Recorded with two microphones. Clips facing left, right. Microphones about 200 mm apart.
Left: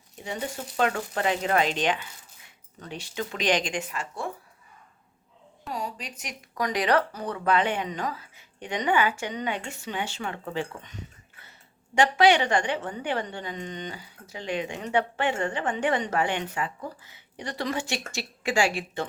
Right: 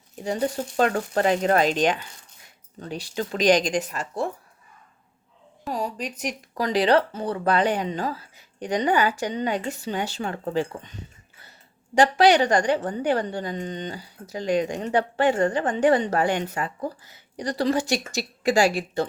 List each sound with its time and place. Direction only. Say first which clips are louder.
0.3 s a woman's voice: right 8 dB; 40° right (ahead or behind)
5.6 s a woman's voice: right 5 dB; 40° right (ahead or behind)